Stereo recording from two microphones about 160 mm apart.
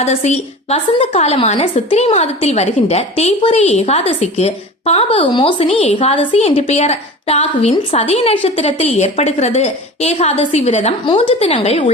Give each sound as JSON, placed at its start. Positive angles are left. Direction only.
{"t": 0.0, "sound": "a woman's voice", "side_deg": 45}